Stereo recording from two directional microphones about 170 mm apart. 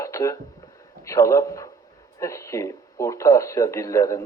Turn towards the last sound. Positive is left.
turn(degrees=20)  # may be behind; listen again after turning